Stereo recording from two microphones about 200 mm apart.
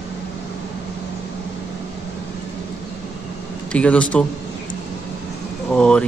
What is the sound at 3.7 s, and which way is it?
Mantra, 5° left (ahead or behind).